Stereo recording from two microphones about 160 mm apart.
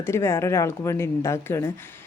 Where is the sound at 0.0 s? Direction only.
15° left (ahead or behind).